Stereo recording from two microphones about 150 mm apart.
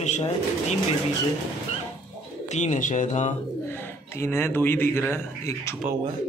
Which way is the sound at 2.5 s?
50° left (ahead or behind).